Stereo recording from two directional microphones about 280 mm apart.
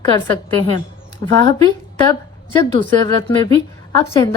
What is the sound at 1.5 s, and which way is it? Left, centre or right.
A woman's voice, centre.